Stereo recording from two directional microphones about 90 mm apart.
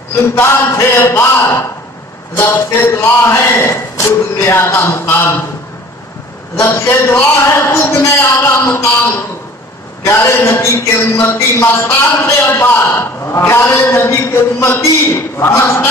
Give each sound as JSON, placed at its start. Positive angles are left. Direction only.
{"t": 0.4, "sound": "a man's voice", "side_deg": 30}
{"t": 2.8, "sound": "a man's voice", "side_deg": 30}
{"t": 6.6, "sound": "a man's voice", "side_deg": 30}